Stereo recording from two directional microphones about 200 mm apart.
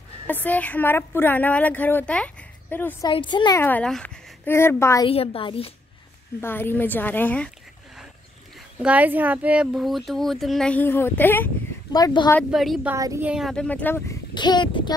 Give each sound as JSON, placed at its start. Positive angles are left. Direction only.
{"t": 0.3, "sound": "a woman's voice", "side_deg": 10}
{"t": 3.1, "sound": "speech", "side_deg": 25}
{"t": 3.6, "sound": "a woman's voice", "side_deg": 5}
{"t": 5.0, "sound": "speech", "side_deg": 30}
{"t": 6.4, "sound": "a woman's voice", "side_deg": 10}
{"t": 8.7, "sound": "speech", "side_deg": -5}
{"t": 12.4, "sound": "speech", "side_deg": 0}
{"t": 12.9, "sound": "speech", "side_deg": -15}
{"t": 14.3, "sound": "speech", "side_deg": 20}